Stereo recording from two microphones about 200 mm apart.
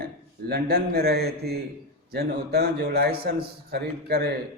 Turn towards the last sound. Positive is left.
turn(degrees=-50)  # may be behind; listen again after turning